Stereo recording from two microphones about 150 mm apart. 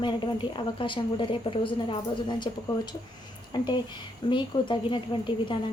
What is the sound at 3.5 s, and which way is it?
A woman's voice, 30° left (ahead or behind).